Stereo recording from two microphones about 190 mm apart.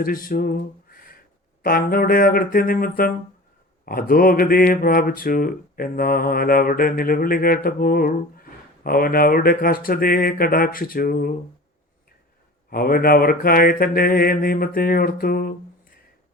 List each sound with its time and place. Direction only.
0.0 s a sound: 50° left (ahead or behind)
1.6 s mantra: 50° left (ahead or behind)
12.7 s mantra: 50° left (ahead or behind)